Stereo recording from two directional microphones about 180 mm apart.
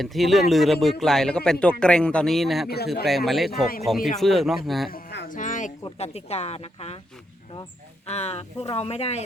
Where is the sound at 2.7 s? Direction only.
60° left (ahead or behind).